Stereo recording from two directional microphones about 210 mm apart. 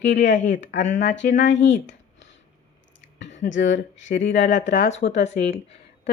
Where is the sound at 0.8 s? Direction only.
35° left (ahead or behind).